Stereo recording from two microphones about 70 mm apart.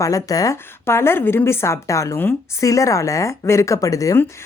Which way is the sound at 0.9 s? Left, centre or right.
Left.